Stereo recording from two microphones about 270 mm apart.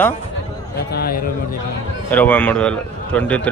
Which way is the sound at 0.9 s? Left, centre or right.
Left.